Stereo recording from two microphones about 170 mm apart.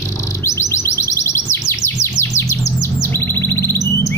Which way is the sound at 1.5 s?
15° left (ahead or behind).